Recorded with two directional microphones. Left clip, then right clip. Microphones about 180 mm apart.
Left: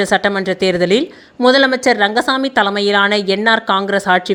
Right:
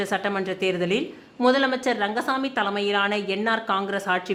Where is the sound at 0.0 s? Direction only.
35° left (ahead or behind).